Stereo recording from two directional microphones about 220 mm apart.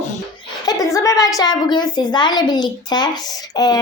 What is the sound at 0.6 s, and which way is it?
A woman's voice, 15° left (ahead or behind).